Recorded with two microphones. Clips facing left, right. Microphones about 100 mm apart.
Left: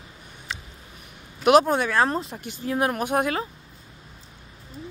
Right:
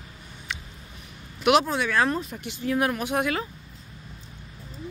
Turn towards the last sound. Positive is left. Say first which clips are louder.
# left 2 dB
turn(degrees=35)  # may be behind; listen again after turning